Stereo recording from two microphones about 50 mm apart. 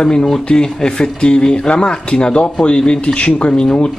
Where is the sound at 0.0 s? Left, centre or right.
Centre.